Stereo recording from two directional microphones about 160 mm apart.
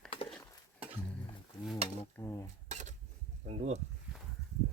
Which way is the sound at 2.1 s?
15° left (ahead or behind).